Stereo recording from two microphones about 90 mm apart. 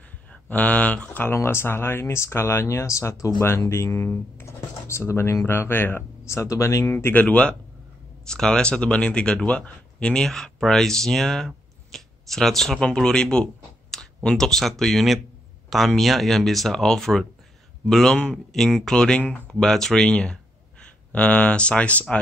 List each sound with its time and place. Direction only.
0.3 s speech: 15° left (ahead or behind)
19.6 s speech: 5° left (ahead or behind)